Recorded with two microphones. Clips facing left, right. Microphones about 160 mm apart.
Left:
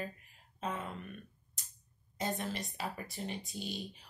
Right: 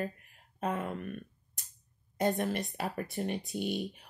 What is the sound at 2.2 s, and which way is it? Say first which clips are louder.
A woman's voice: right 7 dB; 55° right (ahead or behind).